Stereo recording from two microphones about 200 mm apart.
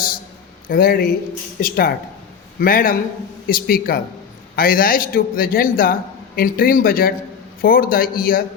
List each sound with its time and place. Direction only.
0.7 s a man's voice: 50° left (ahead or behind)